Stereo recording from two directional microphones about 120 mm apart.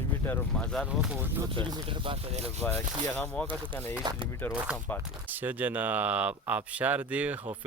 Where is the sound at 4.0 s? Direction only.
35° right (ahead or behind).